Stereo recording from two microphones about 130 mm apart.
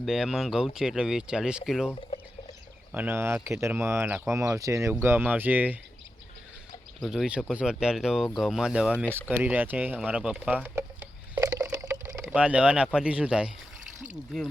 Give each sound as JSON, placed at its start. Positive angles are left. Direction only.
{"t": 0.0, "sound": "speech", "side_deg": -5}
{"t": 2.9, "sound": "speech", "side_deg": -15}
{"t": 7.0, "sound": "speech", "side_deg": 0}
{"t": 11.3, "sound": "a sound", "side_deg": -20}
{"t": 12.2, "sound": "speech", "side_deg": -10}